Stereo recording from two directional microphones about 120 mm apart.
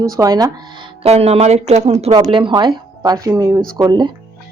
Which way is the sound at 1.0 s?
60° right (ahead or behind).